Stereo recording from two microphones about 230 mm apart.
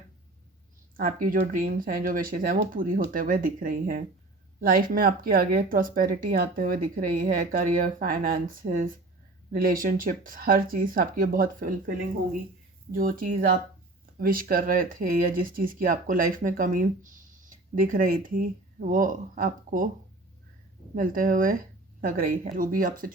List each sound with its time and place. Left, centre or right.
0.9 s speech: right
20.9 s speech: right